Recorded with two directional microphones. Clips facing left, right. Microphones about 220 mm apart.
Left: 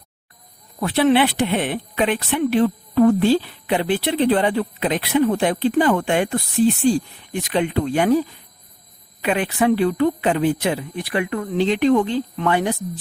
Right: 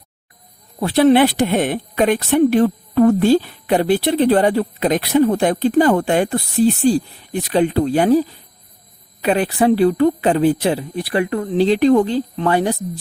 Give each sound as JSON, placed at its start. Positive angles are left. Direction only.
{"t": 0.8, "sound": "speech", "side_deg": -35}